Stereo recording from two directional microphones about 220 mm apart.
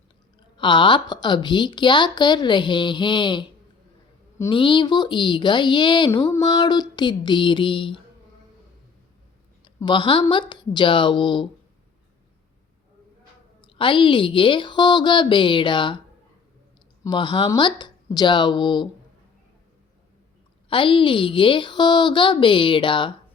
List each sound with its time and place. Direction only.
0.5 s a woman's voice: 20° left (ahead or behind)
9.6 s a woman's voice: 20° left (ahead or behind)
13.6 s a woman's voice: 20° left (ahead or behind)
17.0 s a woman's voice: 20° left (ahead or behind)
20.7 s a woman's voice: 25° left (ahead or behind)